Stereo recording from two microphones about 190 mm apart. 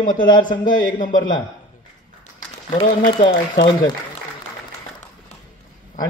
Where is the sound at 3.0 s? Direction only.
25° left (ahead or behind).